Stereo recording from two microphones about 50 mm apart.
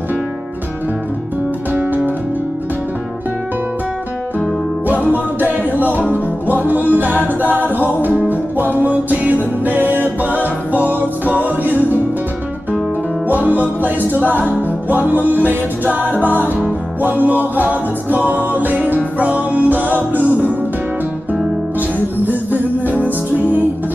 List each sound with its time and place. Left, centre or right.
1.7 s music: right
4.8 s music: right
13.3 s music: right
21.7 s music: right